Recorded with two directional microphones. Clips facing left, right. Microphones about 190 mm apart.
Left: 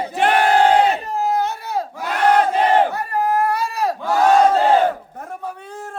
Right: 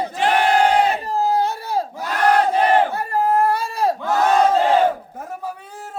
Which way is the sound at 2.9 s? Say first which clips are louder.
Right 1 dB; 30° right (ahead or behind).